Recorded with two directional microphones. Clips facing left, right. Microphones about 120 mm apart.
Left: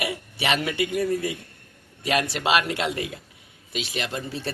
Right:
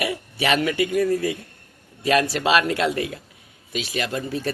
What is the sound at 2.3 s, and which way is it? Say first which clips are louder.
Speech: right 3 dB; 20° left (ahead or behind).